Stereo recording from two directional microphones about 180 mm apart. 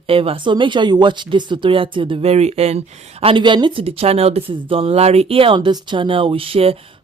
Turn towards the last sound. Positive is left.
turn(degrees=-30)  # may be behind; listen again after turning